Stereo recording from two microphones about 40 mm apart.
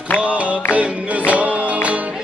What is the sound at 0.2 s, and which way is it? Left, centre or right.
Music, right.